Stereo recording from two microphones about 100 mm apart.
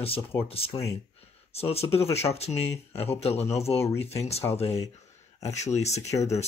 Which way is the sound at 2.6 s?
25° left (ahead or behind).